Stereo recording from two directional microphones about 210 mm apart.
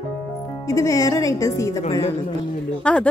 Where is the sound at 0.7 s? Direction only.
15° left (ahead or behind).